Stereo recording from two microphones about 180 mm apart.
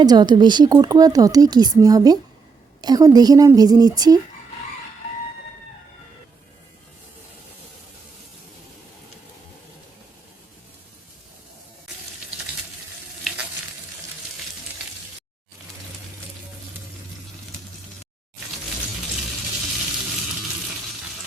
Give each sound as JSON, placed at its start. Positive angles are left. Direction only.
{"t": 0.0, "sound": "speech", "side_deg": -25}